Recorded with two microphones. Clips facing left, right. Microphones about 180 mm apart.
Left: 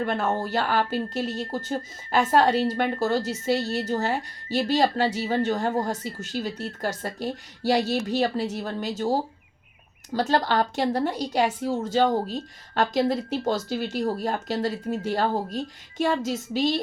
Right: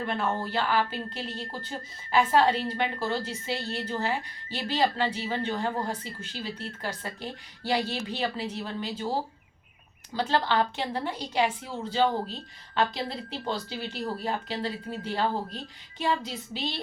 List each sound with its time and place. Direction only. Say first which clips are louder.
0.1 s speech: left 4 dB; 45° left (ahead or behind)